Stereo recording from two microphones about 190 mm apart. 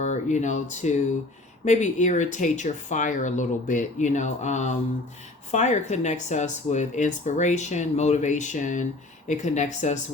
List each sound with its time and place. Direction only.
0.0 s speech: 40° left (ahead or behind)